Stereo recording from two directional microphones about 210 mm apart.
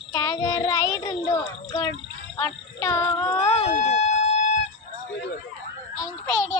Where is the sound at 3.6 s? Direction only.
30° left (ahead or behind).